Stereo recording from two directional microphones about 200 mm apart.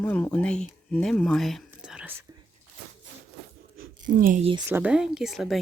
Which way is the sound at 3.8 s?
45° right (ahead or behind).